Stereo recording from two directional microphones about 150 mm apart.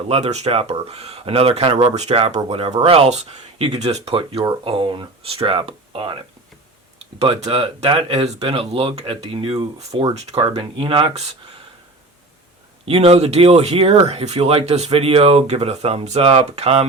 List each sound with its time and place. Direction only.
0.1 s speech: 45° right (ahead or behind)
7.2 s speech: 45° right (ahead or behind)
12.8 s speech: 40° right (ahead or behind)